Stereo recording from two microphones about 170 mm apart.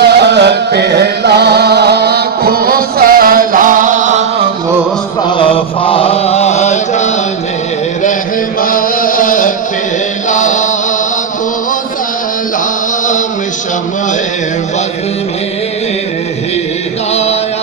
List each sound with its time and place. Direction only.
0.0 s music: 75° right (ahead or behind); by 4.2 s 50° right (ahead or behind)
5.4 s mantra: 30° left (ahead or behind)
8.6 s a sound: 55° left (ahead or behind)
10.3 s chant: 45° left (ahead or behind)
17.1 s music: 40° left (ahead or behind)